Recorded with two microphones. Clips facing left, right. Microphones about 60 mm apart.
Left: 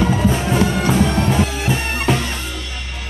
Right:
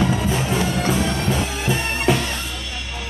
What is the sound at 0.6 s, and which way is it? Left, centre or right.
Music, left.